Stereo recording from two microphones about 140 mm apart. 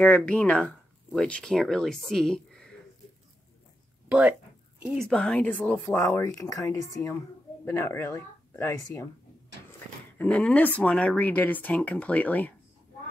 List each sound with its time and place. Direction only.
0.0 s speech: 10° left (ahead or behind)
4.1 s speech: 10° right (ahead or behind)
4.9 s speech: 5° left (ahead or behind)